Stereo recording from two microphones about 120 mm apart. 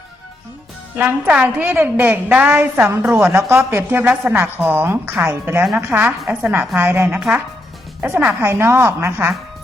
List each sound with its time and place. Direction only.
0.9 s a woman's voice: 15° right (ahead or behind)